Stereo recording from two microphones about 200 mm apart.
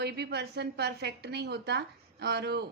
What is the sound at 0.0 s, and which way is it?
A woman's voice, 55° right (ahead or behind).